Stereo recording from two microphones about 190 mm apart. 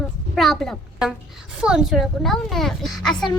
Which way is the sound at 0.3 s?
Centre (ahead or behind).